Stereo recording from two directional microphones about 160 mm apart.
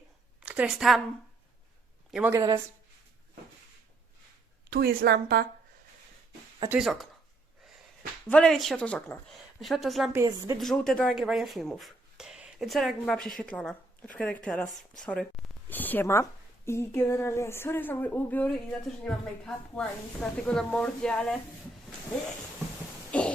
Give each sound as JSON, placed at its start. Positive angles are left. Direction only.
{"t": 0.3, "sound": "speech", "side_deg": -5}
{"t": 2.0, "sound": "speech", "side_deg": -5}
{"t": 2.3, "sound": "a woman's voice", "side_deg": -20}
{"t": 4.7, "sound": "a woman's voice", "side_deg": -70}
{"t": 6.7, "sound": "speech", "side_deg": -5}
{"t": 8.3, "sound": "speech", "side_deg": 5}
{"t": 9.6, "sound": "speech", "side_deg": 0}
{"t": 10.1, "sound": "a woman's voice", "side_deg": -20}
{"t": 10.6, "sound": "speech", "side_deg": 5}
{"t": 23.1, "sound": "a sound", "side_deg": 10}